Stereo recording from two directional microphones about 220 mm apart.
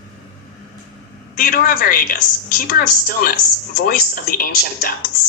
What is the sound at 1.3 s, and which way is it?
A woman's voice, 40° left (ahead or behind).